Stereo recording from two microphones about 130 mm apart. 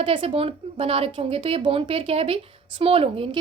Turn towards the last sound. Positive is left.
turn(degrees=-45)  # may be behind; listen again after turning